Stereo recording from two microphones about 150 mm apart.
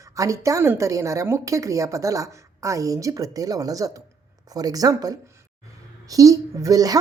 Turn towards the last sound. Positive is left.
turn(degrees=-25)  # may be behind; listen again after turning